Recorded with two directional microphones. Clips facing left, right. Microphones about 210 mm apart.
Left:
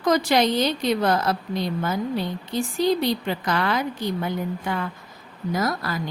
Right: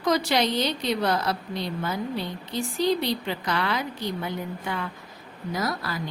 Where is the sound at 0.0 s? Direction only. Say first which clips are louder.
Left 4 dB; 50° left (ahead or behind).